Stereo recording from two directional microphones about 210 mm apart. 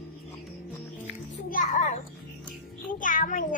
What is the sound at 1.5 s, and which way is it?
Music, 35° left (ahead or behind).